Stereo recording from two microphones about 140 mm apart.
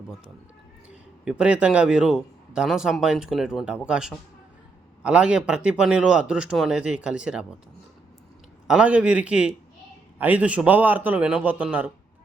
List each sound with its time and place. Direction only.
1.2 s speech: 5° right (ahead or behind)
8.6 s speech: 5° right (ahead or behind)